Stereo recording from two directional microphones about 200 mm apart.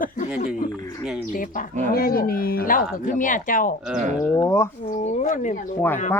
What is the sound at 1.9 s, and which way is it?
A woman's voice, 50° left (ahead or behind).